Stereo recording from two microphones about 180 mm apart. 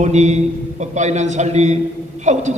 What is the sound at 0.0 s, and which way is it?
A man's voice, 40° right (ahead or behind).